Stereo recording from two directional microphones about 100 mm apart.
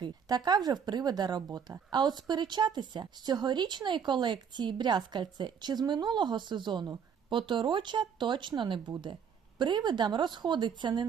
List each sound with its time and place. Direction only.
0.0 s a woman's voice: 45° right (ahead or behind)